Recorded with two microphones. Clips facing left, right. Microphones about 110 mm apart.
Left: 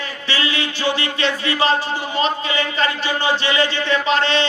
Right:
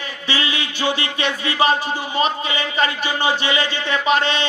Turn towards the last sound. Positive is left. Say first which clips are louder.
# left 1 dB
turn(degrees=-15)  # may be behind; listen again after turning